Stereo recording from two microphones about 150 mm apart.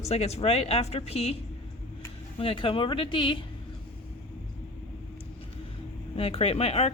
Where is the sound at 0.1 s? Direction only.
45° left (ahead or behind).